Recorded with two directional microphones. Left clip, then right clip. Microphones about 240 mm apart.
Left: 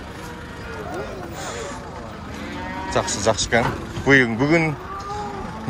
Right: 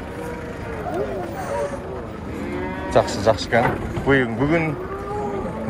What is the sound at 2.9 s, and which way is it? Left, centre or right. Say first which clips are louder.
Speech: right 3 dB; left.